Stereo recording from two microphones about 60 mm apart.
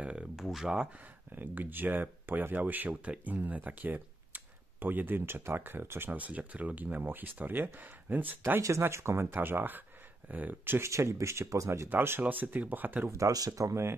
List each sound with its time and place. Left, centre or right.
0.0 s a sound: centre
0.4 s speech: centre
1.3 s speech: right
6.1 s speech: right
8.5 s speech: right
10.8 s speech: right
12.2 s speech: right
13.3 s speech: right